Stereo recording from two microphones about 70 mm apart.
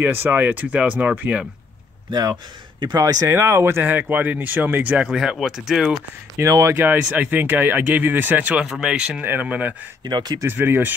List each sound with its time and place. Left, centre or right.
0.0 s speech: right
3.0 s speech: right
3.3 s speech: right
3.8 s speech: right
5.0 s speech: centre
6.4 s speech: right
6.7 s speech: right
8.6 s speech: centre
9.2 s speech: right
10.0 s speech: right
10.4 s speech: right